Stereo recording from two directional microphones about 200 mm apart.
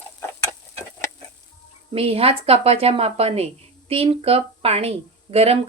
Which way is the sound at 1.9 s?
30° right (ahead or behind).